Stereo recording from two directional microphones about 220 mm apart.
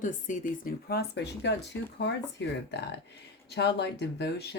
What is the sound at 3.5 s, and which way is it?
Speech, 50° left (ahead or behind).